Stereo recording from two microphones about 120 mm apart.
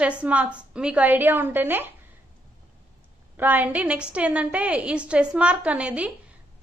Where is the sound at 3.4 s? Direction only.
15° right (ahead or behind).